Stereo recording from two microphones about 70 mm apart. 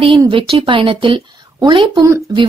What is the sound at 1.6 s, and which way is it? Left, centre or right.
Speech, right.